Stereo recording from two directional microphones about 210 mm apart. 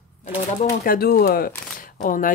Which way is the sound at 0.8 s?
45° left (ahead or behind).